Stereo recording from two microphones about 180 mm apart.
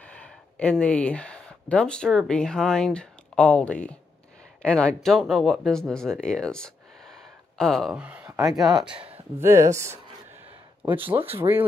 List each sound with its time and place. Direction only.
0.0 s speech: 5° left (ahead or behind); by 8.5 s 15° right (ahead or behind)
8.5 s speech: centre (ahead or behind)
8.9 s a sound: 30° right (ahead or behind)
9.4 s speech: 15° right (ahead or behind)